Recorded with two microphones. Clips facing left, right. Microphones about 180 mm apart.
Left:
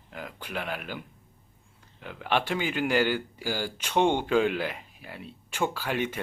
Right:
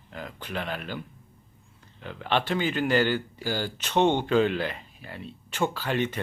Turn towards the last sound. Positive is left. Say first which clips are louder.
# right 2 dB
turn(degrees=10)  # may be behind; listen again after turning